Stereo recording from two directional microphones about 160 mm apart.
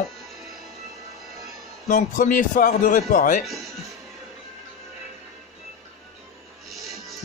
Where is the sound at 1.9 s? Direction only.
55° left (ahead or behind).